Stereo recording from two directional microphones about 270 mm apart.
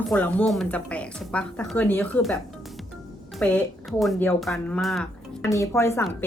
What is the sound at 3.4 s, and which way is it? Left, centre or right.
A woman's voice, centre.